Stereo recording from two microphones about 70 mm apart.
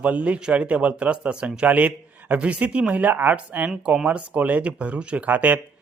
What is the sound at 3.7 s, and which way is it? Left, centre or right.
A man's voice, centre.